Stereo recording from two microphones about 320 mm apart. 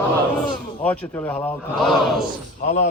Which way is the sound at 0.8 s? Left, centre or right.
Centre.